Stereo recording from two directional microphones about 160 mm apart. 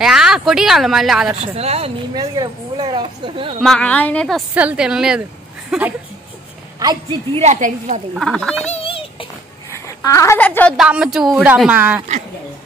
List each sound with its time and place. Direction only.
0.0 s speech: 5° right (ahead or behind)
1.4 s speech: 40° right (ahead or behind)
2.1 s speech: 25° right (ahead or behind)
3.6 s speech: 5° left (ahead or behind)
4.6 s speech: 5° right (ahead or behind)
6.8 s speech: 25° right (ahead or behind)
7.3 s a woman's voice: 50° right (ahead or behind)
8.1 s speech: centre (ahead or behind)
8.6 s a sound: 35° left (ahead or behind)
9.7 s speech: 20° left (ahead or behind)
10.8 s speech: 5° right (ahead or behind)